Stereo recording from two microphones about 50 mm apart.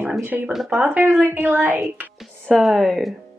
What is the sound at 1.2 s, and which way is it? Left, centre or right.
Speech, right.